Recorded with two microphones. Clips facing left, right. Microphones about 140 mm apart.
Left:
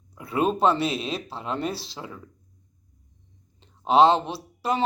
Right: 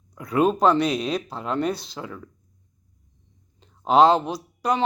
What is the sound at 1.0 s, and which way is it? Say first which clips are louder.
Speech: right 4 dB; 30° left (ahead or behind).